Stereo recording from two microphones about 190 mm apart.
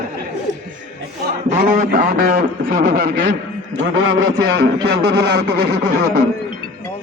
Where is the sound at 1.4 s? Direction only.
45° right (ahead or behind).